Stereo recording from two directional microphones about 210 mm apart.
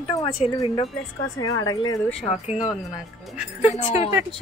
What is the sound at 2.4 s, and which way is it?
Speech, 5° right (ahead or behind).